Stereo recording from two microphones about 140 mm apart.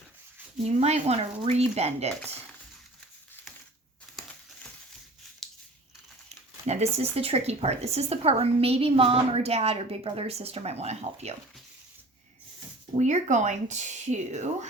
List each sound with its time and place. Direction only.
0.8 s speech: 50° right (ahead or behind)
6.2 s speech: 50° right (ahead or behind)
13.0 s speech: 60° right (ahead or behind)